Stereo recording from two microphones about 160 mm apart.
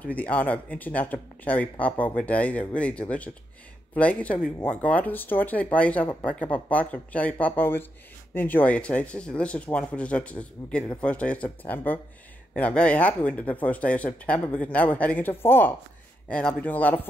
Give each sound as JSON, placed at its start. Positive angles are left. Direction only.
{"t": 0.0, "sound": "speech", "side_deg": 10}